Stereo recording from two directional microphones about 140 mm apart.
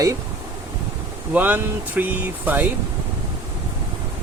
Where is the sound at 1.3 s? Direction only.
10° right (ahead or behind).